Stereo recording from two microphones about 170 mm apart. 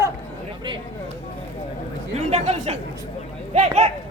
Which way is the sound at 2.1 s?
40° right (ahead or behind).